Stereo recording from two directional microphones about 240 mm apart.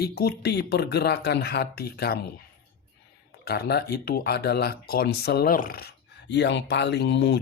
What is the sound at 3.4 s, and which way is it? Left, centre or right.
Speech, left.